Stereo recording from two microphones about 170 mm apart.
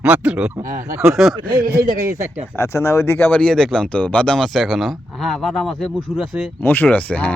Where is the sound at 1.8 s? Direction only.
15° right (ahead or behind).